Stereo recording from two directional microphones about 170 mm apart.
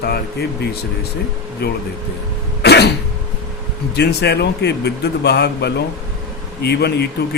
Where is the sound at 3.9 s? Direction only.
75° left (ahead or behind).